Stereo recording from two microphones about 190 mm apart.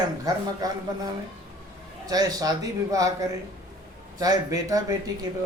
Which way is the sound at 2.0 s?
20° right (ahead or behind).